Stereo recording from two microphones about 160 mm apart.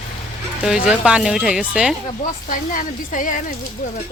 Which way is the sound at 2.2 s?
55° left (ahead or behind).